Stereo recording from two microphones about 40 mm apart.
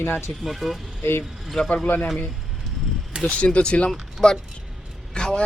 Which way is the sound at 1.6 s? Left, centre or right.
Left.